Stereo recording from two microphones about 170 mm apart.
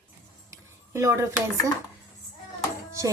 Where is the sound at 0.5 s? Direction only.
15° right (ahead or behind).